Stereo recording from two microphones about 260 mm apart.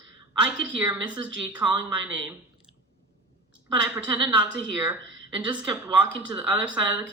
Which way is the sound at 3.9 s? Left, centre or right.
Centre.